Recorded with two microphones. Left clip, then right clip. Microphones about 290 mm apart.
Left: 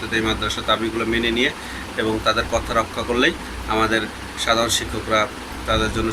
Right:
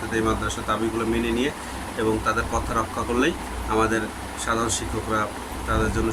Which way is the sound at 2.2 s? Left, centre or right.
Centre.